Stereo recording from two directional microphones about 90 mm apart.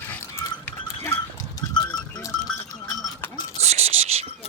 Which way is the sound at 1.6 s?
50° left (ahead or behind).